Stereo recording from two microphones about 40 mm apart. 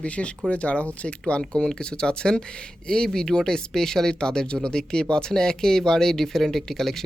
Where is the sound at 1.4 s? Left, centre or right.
Centre.